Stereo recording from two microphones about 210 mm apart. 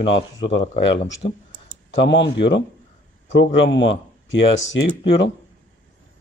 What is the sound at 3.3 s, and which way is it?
Speech, 60° left (ahead or behind).